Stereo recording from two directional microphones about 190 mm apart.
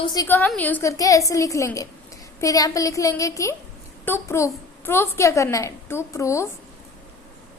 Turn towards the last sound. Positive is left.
turn(degrees=15)  # may be behind; listen again after turning